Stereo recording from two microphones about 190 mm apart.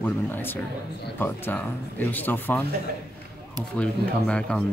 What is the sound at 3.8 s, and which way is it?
Speech, 5° left (ahead or behind).